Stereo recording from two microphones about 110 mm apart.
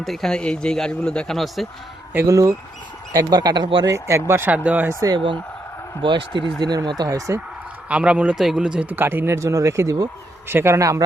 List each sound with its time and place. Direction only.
0.0 s a man's voice: centre (ahead or behind)
2.1 s speech: 30° right (ahead or behind); by 3.8 s 45° right (ahead or behind)
3.9 s speech: 25° right (ahead or behind)
4.9 s speech: 35° right (ahead or behind)
6.0 s speech: 50° right (ahead or behind)
6.6 s speech: 40° right (ahead or behind)
7.9 s speech: 10° right (ahead or behind); by 11.0 s 30° right (ahead or behind)